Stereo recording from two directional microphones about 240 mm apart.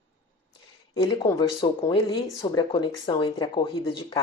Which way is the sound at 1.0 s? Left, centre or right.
Centre.